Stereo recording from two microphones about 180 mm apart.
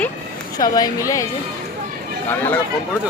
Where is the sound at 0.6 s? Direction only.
20° left (ahead or behind).